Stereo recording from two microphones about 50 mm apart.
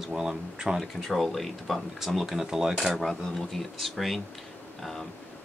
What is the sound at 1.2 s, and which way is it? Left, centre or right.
Speech, centre.